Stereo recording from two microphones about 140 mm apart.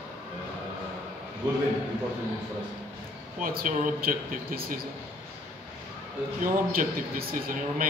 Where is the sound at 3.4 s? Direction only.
85° right.